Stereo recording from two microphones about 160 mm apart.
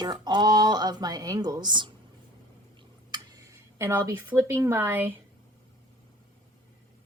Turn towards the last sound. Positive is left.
turn(degrees=-15)  # may be behind; listen again after turning